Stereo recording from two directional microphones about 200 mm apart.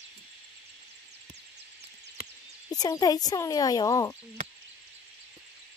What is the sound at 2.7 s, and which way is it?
Speech, 20° left (ahead or behind).